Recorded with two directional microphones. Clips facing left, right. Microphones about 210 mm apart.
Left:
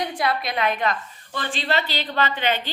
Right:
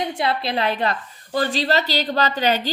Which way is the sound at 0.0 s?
25° right (ahead or behind).